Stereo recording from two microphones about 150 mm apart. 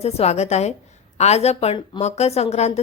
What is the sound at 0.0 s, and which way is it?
A woman's voice, 45° left (ahead or behind).